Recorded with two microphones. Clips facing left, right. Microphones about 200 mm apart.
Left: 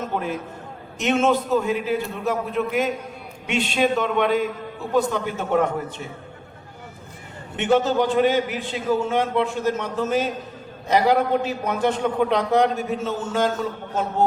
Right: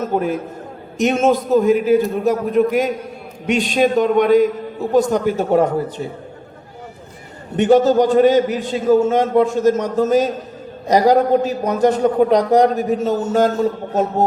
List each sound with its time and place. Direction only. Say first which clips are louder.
0.0 s a man's voice: right 7 dB; 40° right (ahead or behind)
7.5 s a man's voice: right 7 dB; 40° right (ahead or behind)